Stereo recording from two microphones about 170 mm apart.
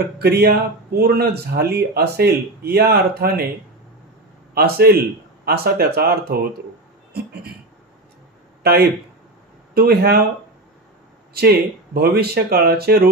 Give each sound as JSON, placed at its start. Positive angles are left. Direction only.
{"t": 0.2, "sound": "a man's voice", "side_deg": -70}
{"t": 4.6, "sound": "speech", "side_deg": -65}
{"t": 9.8, "sound": "speech", "side_deg": -65}
{"t": 11.3, "sound": "speech", "side_deg": -65}